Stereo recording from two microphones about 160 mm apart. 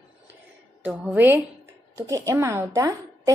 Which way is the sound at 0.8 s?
10° right (ahead or behind).